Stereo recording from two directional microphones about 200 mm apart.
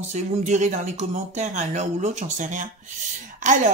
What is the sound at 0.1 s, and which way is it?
Speech, 35° right (ahead or behind).